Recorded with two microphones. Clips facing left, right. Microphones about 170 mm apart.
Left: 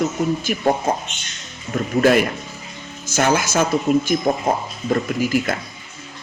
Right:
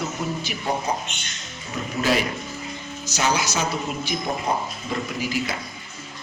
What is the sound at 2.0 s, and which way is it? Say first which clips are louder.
Speech: left 6 dB; 55° left (ahead or behind).